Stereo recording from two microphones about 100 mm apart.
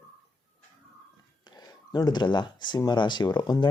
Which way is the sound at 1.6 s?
40° left (ahead or behind).